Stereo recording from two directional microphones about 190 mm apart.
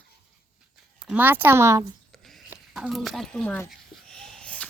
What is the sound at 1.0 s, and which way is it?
Speech, 10° right (ahead or behind).